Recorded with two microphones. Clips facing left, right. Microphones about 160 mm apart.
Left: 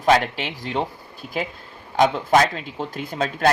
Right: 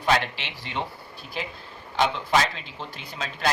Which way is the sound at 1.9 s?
45° left (ahead or behind).